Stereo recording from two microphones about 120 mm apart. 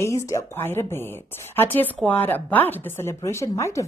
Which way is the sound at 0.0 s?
25° left (ahead or behind).